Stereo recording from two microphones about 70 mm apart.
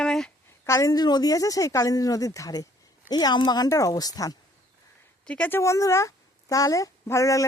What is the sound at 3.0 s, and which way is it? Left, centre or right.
Speech, left.